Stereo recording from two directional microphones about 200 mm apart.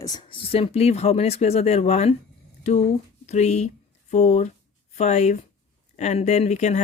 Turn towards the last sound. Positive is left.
turn(degrees=35)  # may be behind; listen again after turning